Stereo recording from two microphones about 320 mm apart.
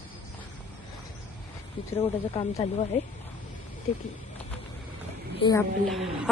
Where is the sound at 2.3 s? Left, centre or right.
Centre.